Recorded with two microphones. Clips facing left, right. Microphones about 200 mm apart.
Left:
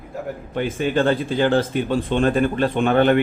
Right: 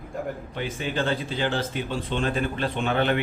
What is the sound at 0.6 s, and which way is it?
Speech, 55° left (ahead or behind).